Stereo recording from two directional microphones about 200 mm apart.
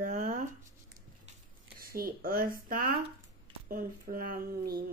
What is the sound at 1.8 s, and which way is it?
Speech, 45° right (ahead or behind).